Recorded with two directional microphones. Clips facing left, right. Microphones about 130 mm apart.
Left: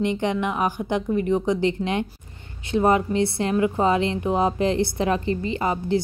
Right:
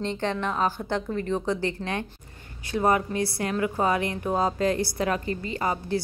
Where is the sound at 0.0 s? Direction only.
15° left (ahead or behind).